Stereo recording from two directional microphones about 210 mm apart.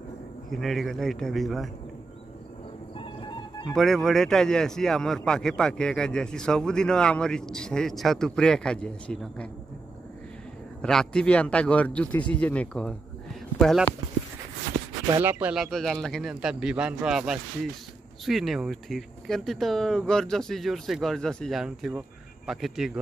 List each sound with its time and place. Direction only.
0.5 s speech: centre (ahead or behind)
3.0 s music: 25° left (ahead or behind)
3.7 s speech: centre (ahead or behind)
10.8 s speech: 5° left (ahead or behind)
15.2 s speech: 10° right (ahead or behind)